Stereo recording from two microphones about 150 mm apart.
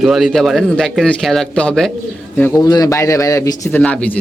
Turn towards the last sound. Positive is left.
turn(degrees=10)  # may be behind; listen again after turning